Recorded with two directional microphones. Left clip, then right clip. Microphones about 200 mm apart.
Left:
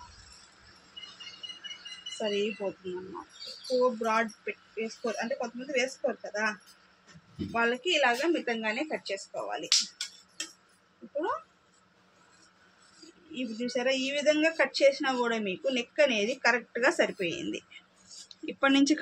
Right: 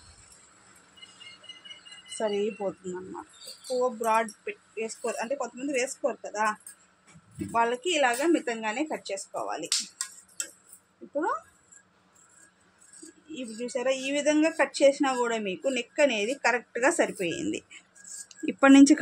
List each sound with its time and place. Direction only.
2.1 s speech: 40° right (ahead or behind)
4.0 s speech: 30° right (ahead or behind)
7.5 s speech: 35° right (ahead or behind)
13.3 s speech: 25° right (ahead or behind); by 18.9 s 50° right (ahead or behind)